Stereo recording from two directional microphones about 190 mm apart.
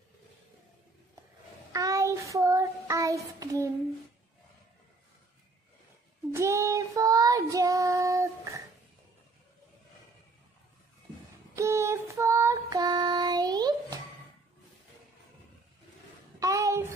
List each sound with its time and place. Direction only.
1.7 s child singing: 20° right (ahead or behind)
6.3 s child singing: 15° right (ahead or behind)
11.5 s child singing: 15° right (ahead or behind)
16.3 s a sound: 15° right (ahead or behind)